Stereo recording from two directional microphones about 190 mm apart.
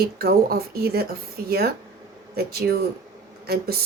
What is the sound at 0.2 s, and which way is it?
Speech, 55° right (ahead or behind).